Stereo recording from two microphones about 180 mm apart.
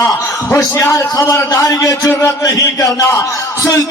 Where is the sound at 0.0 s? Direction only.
20° left (ahead or behind).